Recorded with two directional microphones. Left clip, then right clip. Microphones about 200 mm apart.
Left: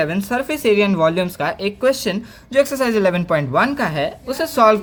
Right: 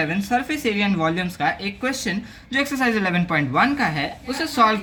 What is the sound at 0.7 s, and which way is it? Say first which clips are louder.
Speech: left 9 dB; 60° left (ahead or behind).